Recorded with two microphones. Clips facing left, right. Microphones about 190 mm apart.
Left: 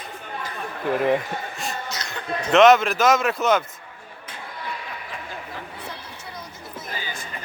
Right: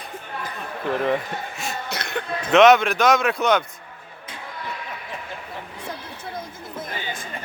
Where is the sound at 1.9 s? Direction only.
60° right (ahead or behind).